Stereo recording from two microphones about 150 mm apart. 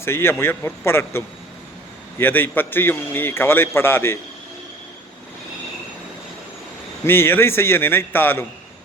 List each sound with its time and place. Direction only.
0.0 s a man's voice: 15° left (ahead or behind)
7.0 s a man's voice: 15° left (ahead or behind)